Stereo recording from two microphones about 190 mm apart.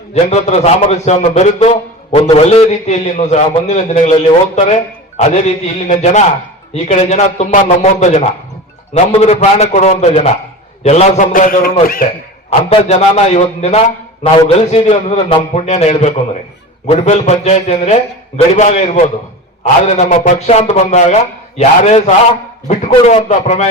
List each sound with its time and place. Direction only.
0.1 s a man's voice: 35° left (ahead or behind)
12.5 s a man's voice: 35° left (ahead or behind)